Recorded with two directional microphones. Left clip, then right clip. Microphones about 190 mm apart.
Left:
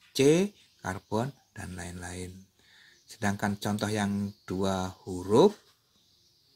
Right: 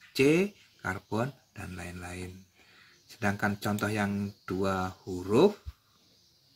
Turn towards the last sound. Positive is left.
turn(degrees=25)  # may be behind; listen again after turning